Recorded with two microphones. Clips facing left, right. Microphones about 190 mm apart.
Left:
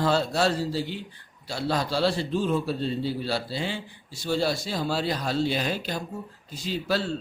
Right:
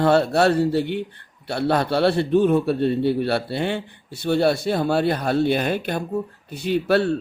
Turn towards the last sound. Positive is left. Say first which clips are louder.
# right 8 dB
turn(degrees=-60)  # may be behind; listen again after turning